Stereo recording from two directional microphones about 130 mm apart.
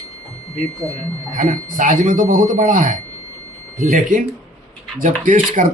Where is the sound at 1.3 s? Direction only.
90° right.